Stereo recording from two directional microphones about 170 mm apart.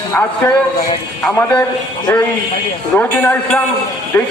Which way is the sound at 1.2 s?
10° left (ahead or behind).